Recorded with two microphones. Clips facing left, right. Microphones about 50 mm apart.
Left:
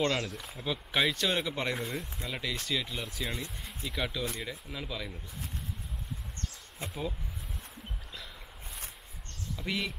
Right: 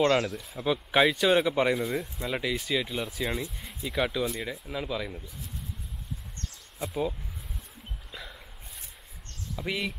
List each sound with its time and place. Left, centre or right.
0.0 s speech: centre
6.9 s speech: centre
8.1 s a sound: centre
9.6 s speech: centre